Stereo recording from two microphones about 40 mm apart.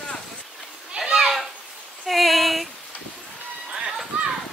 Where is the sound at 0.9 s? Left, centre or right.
Centre.